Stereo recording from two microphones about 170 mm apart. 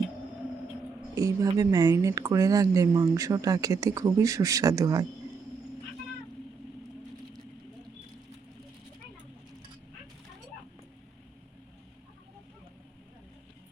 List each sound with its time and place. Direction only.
1.1 s speech: 20° right (ahead or behind)